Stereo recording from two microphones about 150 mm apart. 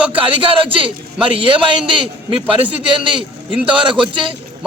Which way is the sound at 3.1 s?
35° right (ahead or behind).